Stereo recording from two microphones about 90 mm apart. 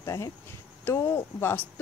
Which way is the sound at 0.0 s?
40° left (ahead or behind).